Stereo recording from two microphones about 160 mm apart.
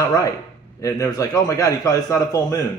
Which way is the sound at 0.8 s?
20° left (ahead or behind).